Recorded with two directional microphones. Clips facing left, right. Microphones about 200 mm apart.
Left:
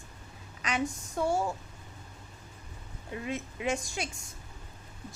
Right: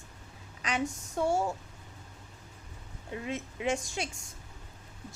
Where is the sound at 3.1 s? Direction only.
25° right (ahead or behind).